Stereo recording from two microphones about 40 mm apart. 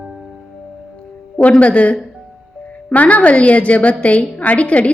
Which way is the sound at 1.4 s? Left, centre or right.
Left.